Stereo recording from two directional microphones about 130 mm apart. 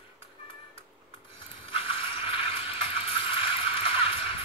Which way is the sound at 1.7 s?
45° left (ahead or behind).